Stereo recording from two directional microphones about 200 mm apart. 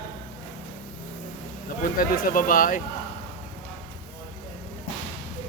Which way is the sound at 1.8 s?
45° left (ahead or behind).